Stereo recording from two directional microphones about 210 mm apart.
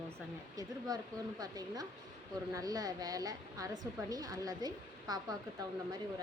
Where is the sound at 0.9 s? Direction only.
20° right (ahead or behind).